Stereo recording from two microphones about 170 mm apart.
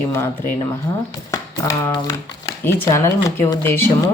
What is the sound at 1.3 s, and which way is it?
Speech, 20° left (ahead or behind).